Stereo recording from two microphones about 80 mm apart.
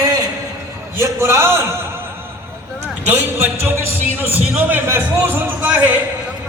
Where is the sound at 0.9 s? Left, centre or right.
Right.